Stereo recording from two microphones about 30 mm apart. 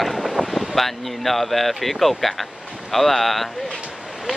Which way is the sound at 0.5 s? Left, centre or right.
Centre.